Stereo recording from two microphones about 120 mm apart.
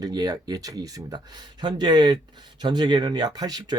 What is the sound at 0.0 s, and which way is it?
Speech, 35° right (ahead or behind).